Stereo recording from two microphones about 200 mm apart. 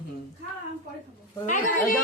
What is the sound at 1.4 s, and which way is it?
Speech, 40° left (ahead or behind).